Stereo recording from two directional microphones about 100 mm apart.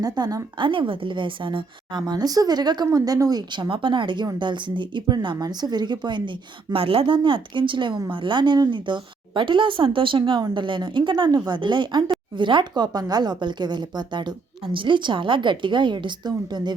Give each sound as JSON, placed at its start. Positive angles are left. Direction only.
{"t": 0.0, "sound": "a woman's voice", "side_deg": -40}
{"t": 0.6, "sound": "a woman's voice", "side_deg": -60}